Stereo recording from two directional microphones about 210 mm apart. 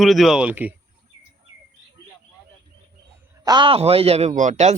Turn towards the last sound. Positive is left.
turn(degrees=-35)  # may be behind; listen again after turning